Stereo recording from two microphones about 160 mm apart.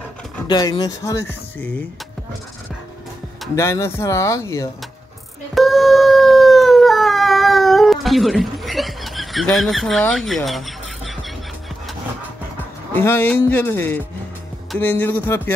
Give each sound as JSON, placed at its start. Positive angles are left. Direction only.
{"t": 0.5, "sound": "speech", "side_deg": 25}
{"t": 3.5, "sound": "speech", "side_deg": 15}
{"t": 5.5, "sound": "howl", "side_deg": 0}
{"t": 12.9, "sound": "speech", "side_deg": 15}